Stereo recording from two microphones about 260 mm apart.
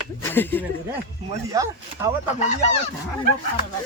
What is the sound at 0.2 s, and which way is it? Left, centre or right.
Speech, centre.